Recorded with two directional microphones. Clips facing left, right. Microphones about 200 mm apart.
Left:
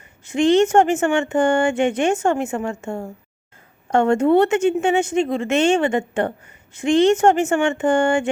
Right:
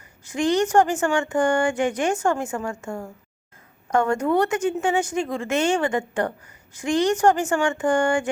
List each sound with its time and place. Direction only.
0.3 s a woman's voice: 25° left (ahead or behind)